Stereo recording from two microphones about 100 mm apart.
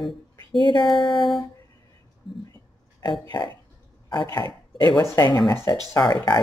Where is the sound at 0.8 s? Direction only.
Centre (ahead or behind).